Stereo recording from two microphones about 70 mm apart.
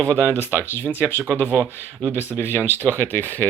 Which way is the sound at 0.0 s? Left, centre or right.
Centre.